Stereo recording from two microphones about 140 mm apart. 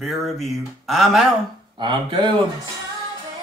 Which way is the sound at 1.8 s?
35° right (ahead or behind).